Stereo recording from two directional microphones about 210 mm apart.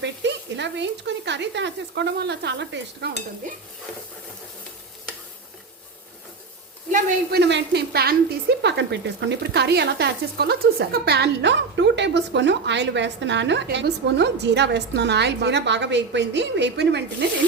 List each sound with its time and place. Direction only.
0.0 s a woman's voice: 55° right (ahead or behind)
6.9 s a woman's voice: 50° right (ahead or behind)